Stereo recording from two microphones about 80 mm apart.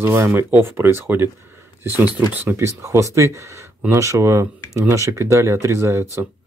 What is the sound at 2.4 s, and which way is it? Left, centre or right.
Speech, right.